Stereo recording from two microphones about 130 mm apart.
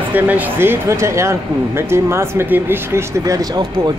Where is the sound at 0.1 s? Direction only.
15° right (ahead or behind).